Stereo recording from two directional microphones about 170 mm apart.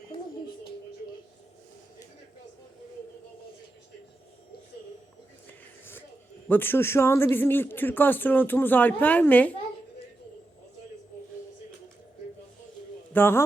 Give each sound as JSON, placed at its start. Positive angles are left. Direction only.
{"t": 0.1, "sound": "music", "side_deg": 30}
{"t": 5.5, "sound": "a sound", "side_deg": 15}
{"t": 6.5, "sound": "speech", "side_deg": 10}
{"t": 13.1, "sound": "speech", "side_deg": 15}